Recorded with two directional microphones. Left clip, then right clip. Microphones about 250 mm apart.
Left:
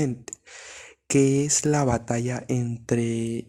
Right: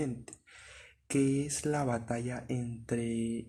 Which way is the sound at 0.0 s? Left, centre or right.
Left.